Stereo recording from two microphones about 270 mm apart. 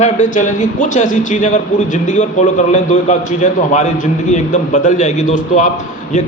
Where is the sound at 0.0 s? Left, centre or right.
Left.